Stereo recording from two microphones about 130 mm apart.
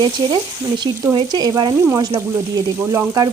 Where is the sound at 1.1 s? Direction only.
30° right (ahead or behind).